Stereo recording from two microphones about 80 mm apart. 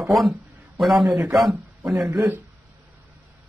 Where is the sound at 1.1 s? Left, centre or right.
Centre.